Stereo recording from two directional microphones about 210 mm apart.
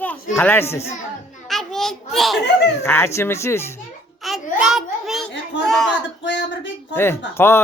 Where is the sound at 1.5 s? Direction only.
Centre (ahead or behind).